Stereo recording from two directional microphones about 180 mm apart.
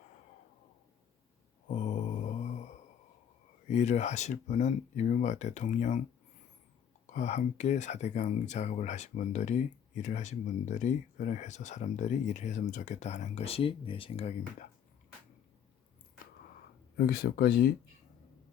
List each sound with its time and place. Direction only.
1.6 s mantra: 45° left (ahead or behind)
3.7 s speech: 40° left (ahead or behind)
7.1 s speech: 40° left (ahead or behind)
17.0 s speech: 60° left (ahead or behind)